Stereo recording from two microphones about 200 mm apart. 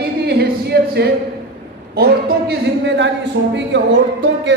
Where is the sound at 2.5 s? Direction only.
60° right (ahead or behind).